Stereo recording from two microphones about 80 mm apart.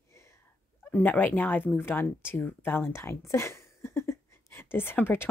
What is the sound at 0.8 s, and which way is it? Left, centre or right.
Speech, left.